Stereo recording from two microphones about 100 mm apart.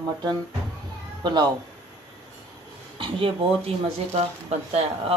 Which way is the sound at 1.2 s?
45° right (ahead or behind).